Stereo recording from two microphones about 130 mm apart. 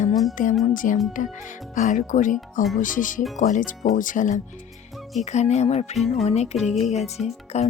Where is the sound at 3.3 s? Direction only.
75° left (ahead or behind).